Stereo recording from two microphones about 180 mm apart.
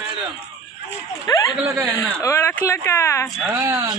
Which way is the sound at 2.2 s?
15° left (ahead or behind).